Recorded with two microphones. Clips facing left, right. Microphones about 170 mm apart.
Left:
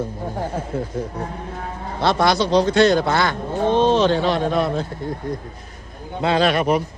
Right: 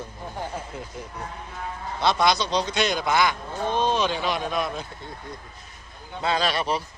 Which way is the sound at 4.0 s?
15° right (ahead or behind).